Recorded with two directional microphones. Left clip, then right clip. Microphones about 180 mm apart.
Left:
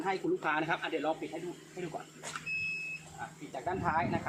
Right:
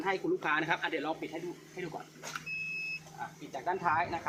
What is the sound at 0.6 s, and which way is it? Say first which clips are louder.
Speech: right 1 dB; 25° left (ahead or behind).